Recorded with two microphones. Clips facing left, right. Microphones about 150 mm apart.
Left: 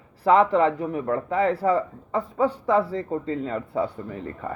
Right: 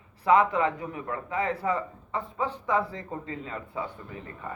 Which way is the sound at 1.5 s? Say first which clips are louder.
Left 7 dB; 35° left (ahead or behind).